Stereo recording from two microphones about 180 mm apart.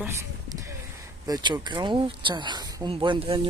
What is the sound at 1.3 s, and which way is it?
Speech, 25° right (ahead or behind).